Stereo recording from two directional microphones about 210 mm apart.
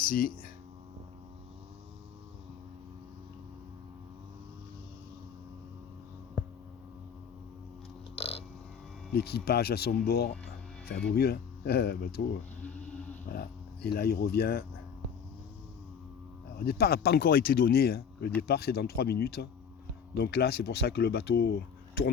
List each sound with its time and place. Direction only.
0.0 s speech: 40° left (ahead or behind)
8.1 s burping: 30° left (ahead or behind)
9.1 s speech: 50° left (ahead or behind)
13.2 s speech: 45° left (ahead or behind)
16.6 s speech: 50° left (ahead or behind)